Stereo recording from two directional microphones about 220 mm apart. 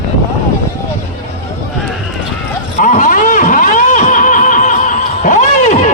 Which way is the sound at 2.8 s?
35° left (ahead or behind).